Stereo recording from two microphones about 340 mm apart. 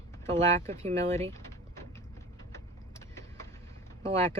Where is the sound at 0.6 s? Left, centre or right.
Centre.